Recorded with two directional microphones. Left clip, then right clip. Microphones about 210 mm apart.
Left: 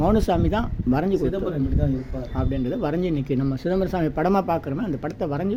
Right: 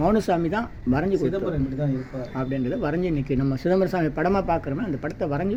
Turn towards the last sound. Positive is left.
turn(degrees=5)  # may be behind; listen again after turning